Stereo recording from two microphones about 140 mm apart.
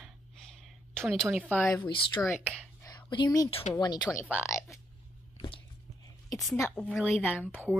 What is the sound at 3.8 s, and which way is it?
Speech, 30° left (ahead or behind).